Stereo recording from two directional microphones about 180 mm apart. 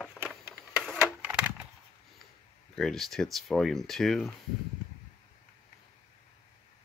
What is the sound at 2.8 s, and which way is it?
Speech, centre (ahead or behind).